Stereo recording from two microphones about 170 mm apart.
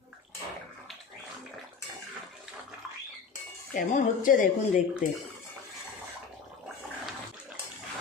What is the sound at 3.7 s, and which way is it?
Speech, 50° left (ahead or behind).